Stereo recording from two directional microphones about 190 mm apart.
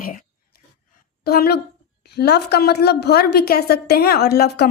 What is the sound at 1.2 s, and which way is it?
A woman's voice, 55° left (ahead or behind).